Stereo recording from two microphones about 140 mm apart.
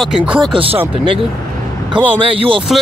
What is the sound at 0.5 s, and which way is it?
Speech, 40° right (ahead or behind).